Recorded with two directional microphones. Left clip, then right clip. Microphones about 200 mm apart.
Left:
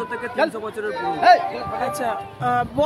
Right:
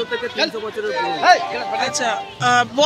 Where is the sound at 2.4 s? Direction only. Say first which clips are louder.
Right 5 dB; 5° left (ahead or behind).